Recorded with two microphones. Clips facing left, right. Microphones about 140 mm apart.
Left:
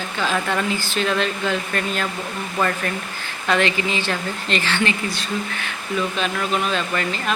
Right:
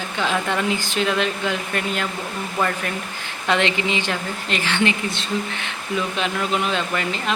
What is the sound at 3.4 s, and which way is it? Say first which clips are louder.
Speech: even; 20° right (ahead or behind).